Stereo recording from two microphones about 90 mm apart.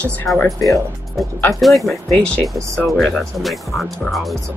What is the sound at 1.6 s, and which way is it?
Speech, centre (ahead or behind).